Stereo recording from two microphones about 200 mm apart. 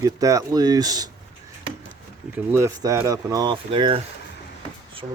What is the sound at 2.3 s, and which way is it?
Speech, 15° right (ahead or behind).